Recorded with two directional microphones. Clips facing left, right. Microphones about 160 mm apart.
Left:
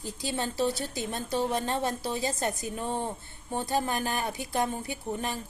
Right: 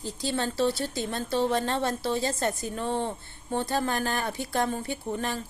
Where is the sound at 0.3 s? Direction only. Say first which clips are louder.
Right 3 dB; 15° left (ahead or behind).